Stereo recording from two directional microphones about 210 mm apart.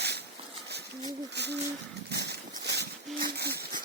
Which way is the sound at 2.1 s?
50° right (ahead or behind).